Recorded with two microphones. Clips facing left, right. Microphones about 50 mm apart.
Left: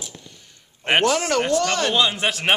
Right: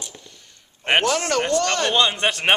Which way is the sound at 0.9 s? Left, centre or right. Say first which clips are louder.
Left 1 dB; centre.